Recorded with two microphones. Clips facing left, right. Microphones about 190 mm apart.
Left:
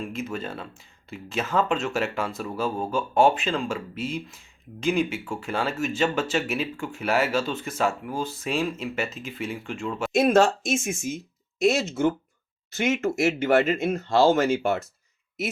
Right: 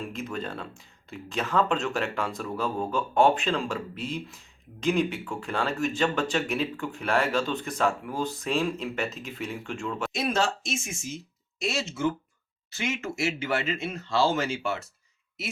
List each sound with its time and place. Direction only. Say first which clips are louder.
0.0 s speech: left 2 dB; 5° left (ahead or behind)
10.2 s speech: left 10 dB; 50° left (ahead or behind)